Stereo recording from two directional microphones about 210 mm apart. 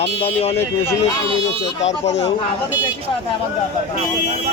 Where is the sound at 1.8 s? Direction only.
30° left (ahead or behind).